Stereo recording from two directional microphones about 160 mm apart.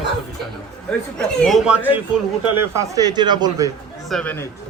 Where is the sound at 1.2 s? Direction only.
Centre (ahead or behind).